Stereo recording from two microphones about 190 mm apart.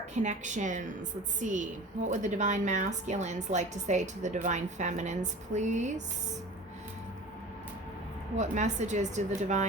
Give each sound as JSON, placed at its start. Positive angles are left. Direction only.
{"t": 0.1, "sound": "a woman's voice", "side_deg": -40}
{"t": 8.4, "sound": "a woman's voice", "side_deg": -40}